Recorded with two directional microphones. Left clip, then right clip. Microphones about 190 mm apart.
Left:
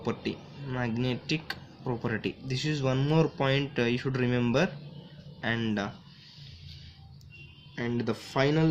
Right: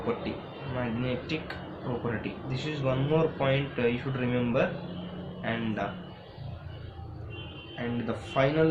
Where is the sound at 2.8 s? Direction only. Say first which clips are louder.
Right 2 dB; 45° left (ahead or behind).